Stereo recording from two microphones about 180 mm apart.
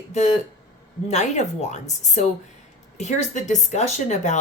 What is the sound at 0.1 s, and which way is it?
A woman's voice, 40° left (ahead or behind).